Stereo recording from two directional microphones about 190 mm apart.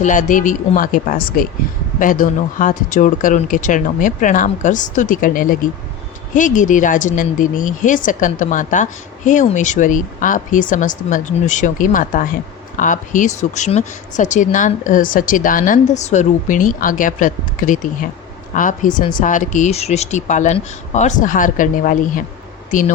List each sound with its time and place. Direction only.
0.0 s speech: 40° left (ahead or behind)